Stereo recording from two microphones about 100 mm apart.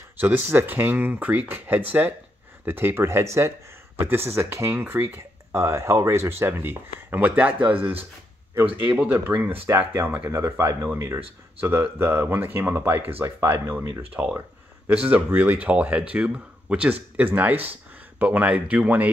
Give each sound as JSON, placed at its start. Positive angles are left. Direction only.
{"t": 0.2, "sound": "speech", "side_deg": -20}